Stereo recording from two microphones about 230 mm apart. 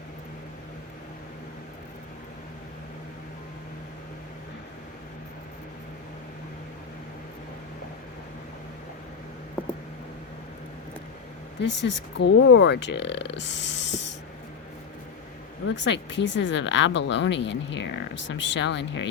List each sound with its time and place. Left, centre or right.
11.6 s speech: left
15.6 s speech: left